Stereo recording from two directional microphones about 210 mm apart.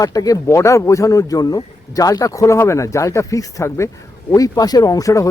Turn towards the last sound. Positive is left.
turn(degrees=15)  # may be behind; listen again after turning